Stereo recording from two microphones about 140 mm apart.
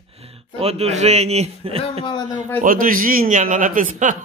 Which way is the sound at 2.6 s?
80° right.